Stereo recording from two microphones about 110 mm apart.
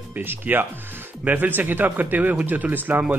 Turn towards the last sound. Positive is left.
turn(degrees=-15)  # may be behind; listen again after turning